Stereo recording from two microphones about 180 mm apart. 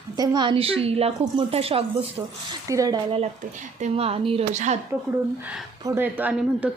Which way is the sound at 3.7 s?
35° right (ahead or behind).